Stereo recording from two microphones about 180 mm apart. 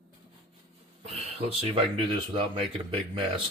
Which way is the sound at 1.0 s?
35° right (ahead or behind).